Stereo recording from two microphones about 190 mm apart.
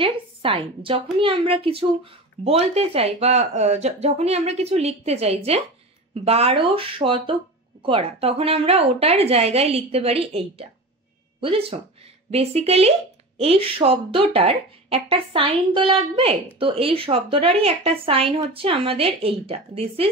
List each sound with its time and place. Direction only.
0.0 s speech: 30° right (ahead or behind)
12.3 s speech: 35° right (ahead or behind)